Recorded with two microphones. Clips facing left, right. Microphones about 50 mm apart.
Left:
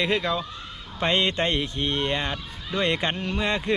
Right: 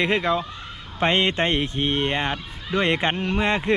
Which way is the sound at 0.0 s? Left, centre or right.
Right.